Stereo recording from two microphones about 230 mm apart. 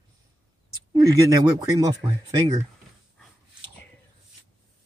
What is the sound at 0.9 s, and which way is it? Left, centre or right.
Speech, centre.